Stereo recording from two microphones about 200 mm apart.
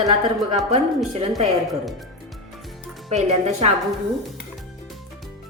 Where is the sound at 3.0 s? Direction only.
35° right (ahead or behind).